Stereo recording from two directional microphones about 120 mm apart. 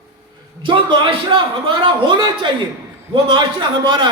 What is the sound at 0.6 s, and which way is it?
A man's voice, 40° right (ahead or behind).